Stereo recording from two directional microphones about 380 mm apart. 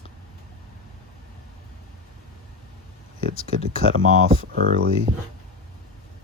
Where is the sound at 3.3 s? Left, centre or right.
Centre.